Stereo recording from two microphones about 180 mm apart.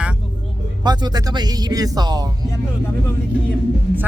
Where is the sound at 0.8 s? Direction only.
25° right (ahead or behind).